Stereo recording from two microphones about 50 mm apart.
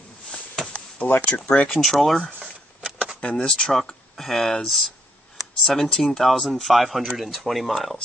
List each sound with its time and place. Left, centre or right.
1.2 s speech: centre
1.7 s speech: centre
2.8 s a sound: centre
3.2 s speech: left; by 8.0 s centre